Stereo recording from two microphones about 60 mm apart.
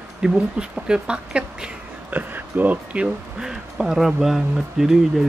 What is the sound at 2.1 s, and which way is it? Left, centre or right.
Speech, right.